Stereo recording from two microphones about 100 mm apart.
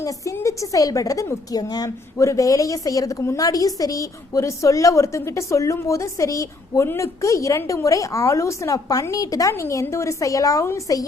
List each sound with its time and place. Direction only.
0.0 s a woman's voice: 30° left (ahead or behind)